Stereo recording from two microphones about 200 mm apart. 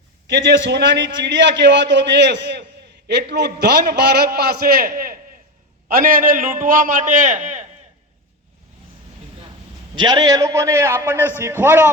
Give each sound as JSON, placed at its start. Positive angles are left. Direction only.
{"t": 0.3, "sound": "a man's voice", "side_deg": -60}
{"t": 9.9, "sound": "a man's voice", "side_deg": -20}